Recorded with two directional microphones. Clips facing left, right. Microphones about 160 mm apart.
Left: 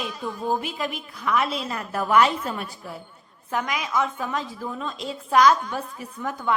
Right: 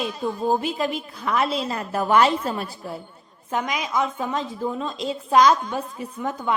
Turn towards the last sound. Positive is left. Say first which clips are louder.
# right 1 dB
turn(degrees=-20)  # may be behind; listen again after turning